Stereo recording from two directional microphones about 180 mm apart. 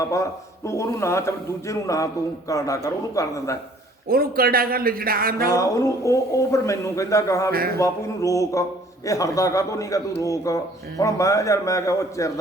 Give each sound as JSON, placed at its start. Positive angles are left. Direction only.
{"t": 0.0, "sound": "a man's voice", "side_deg": 15}
{"t": 4.1, "sound": "speech", "side_deg": -55}
{"t": 5.5, "sound": "a man's voice", "side_deg": 15}